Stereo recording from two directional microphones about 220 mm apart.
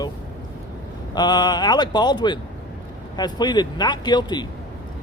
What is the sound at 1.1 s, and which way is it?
Speech, 20° left (ahead or behind).